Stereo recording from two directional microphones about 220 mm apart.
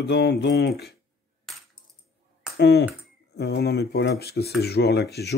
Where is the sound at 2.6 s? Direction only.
50° left (ahead or behind).